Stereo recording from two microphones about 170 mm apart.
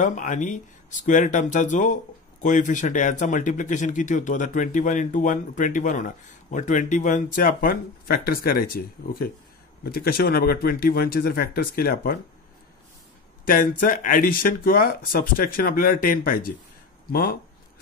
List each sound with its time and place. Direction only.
0.0 s speech: 50° left (ahead or behind)
13.5 s speech: 55° left (ahead or behind)